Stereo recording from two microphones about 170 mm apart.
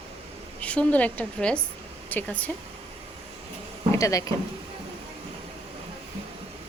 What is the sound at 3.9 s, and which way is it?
Speech, 20° left (ahead or behind).